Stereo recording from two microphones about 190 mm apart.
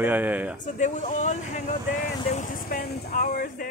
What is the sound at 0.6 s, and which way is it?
Speech, 40° left (ahead or behind).